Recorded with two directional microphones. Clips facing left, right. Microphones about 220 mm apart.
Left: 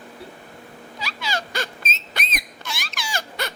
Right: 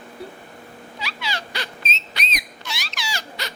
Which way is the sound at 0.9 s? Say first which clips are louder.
Left 2 dB; 45° left (ahead or behind).